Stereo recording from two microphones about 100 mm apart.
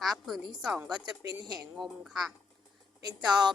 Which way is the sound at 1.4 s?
40° right (ahead or behind).